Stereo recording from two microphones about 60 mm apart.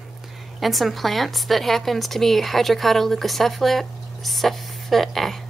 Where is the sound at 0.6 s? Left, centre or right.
Centre.